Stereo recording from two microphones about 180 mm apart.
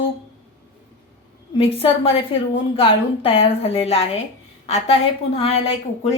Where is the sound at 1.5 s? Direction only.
30° left (ahead or behind).